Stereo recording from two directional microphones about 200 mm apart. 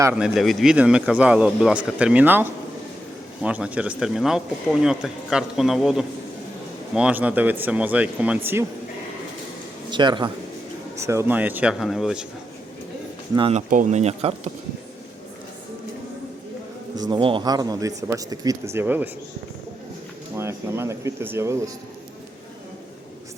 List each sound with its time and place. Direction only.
0.0 s speech: 5° right (ahead or behind)
9.9 s speech: 25° right (ahead or behind); by 12.2 s centre (ahead or behind)
13.3 s speech: 30° right (ahead or behind)
16.9 s speech: 20° right (ahead or behind)
20.3 s speech: 15° right (ahead or behind)